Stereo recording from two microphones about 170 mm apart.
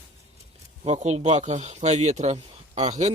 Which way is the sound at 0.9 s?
40° right (ahead or behind).